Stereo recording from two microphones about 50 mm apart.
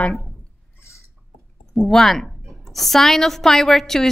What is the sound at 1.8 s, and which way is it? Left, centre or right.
A woman's voice, centre.